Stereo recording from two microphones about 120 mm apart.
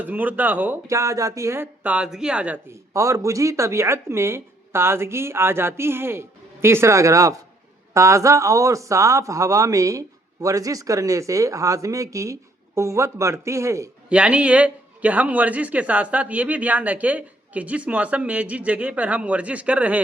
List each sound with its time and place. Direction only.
0.0 s a man's voice: 15° right (ahead or behind)
0.9 s a man's voice: 25° right (ahead or behind); by 2.6 s 10° right (ahead or behind)
2.9 s speech: 25° right (ahead or behind)
14.1 s a man's voice: 10° right (ahead or behind)